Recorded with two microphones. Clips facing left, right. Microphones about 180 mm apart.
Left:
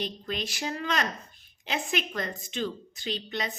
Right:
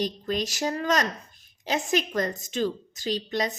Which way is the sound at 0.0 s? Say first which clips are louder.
Right 6 dB; 40° right (ahead or behind).